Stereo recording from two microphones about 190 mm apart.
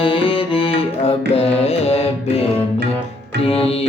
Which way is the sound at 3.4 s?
30° left (ahead or behind).